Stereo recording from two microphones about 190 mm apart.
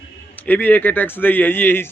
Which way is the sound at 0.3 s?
10° left (ahead or behind).